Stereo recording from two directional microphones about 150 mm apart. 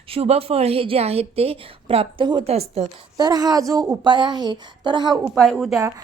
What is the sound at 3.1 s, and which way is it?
A woman's voice, 25° right (ahead or behind).